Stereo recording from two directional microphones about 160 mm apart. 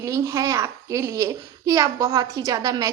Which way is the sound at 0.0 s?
20° right (ahead or behind).